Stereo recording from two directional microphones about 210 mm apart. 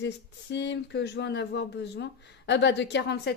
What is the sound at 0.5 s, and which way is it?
Speech, 55° left (ahead or behind).